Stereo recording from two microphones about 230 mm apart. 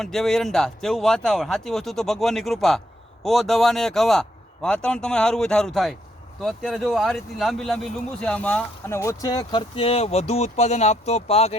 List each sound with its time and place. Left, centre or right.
0.0 s speech: centre; by 11.5 s left